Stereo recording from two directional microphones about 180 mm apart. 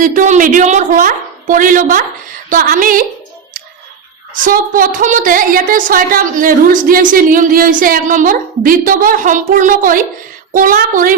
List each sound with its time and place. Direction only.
0.0 s a woman's voice: 45° right (ahead or behind)
4.4 s a woman's voice: 50° right (ahead or behind)